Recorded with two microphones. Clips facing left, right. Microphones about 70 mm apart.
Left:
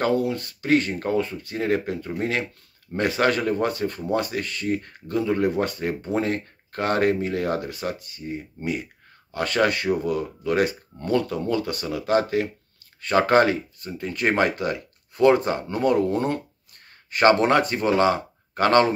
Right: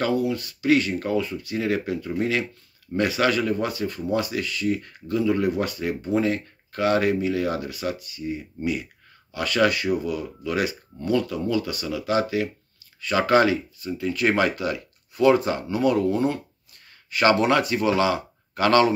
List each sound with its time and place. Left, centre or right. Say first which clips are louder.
0.0 s speech: left 1 dB; left
17.2 s speech: left 2 dB; left